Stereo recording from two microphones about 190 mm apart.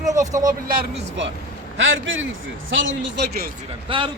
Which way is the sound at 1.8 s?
85° right.